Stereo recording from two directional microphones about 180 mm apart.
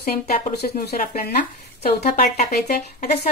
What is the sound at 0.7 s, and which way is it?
Speech, 55° left (ahead or behind).